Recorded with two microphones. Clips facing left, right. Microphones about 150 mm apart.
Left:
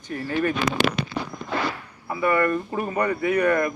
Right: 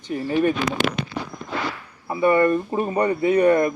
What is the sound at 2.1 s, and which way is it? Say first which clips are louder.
A man's voice: right 4 dB; 25° right (ahead or behind).